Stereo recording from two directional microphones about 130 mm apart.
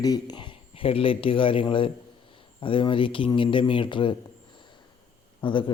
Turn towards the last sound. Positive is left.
turn(degrees=40)  # may be behind; listen again after turning